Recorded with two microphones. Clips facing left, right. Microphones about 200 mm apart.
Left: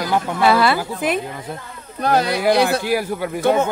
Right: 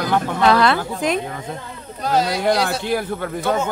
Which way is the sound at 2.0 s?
60° left (ahead or behind).